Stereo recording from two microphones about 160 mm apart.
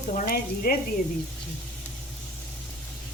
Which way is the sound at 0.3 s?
70° left (ahead or behind).